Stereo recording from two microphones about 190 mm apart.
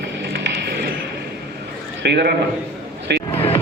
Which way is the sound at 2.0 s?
60° right (ahead or behind).